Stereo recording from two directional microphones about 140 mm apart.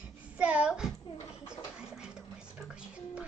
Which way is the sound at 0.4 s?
10° right (ahead or behind).